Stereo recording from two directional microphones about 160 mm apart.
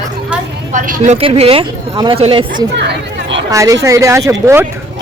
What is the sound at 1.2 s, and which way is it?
Speech, 35° right (ahead or behind).